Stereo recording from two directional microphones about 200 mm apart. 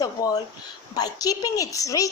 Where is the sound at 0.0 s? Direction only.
20° left (ahead or behind).